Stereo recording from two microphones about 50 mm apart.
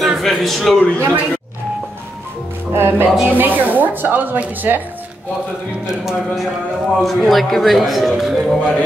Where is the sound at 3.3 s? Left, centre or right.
Right.